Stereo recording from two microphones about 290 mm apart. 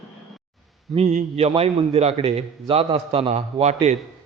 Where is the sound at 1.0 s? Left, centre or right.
Right.